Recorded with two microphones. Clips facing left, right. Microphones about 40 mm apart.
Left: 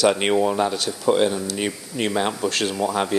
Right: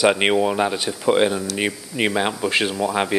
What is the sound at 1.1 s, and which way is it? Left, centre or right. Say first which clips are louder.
Speech: right 2 dB; right.